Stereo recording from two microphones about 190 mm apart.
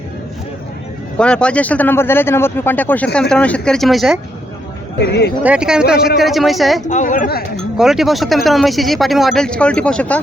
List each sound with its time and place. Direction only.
1.2 s speech: 5° left (ahead or behind)
4.9 s speech: 60° left (ahead or behind)
5.4 s speech: 5° right (ahead or behind)
6.8 s a woman's voice: 40° left (ahead or behind)
7.5 s speech: centre (ahead or behind)